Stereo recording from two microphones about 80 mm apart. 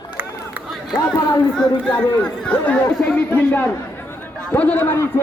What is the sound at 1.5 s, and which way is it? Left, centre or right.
Speech, centre.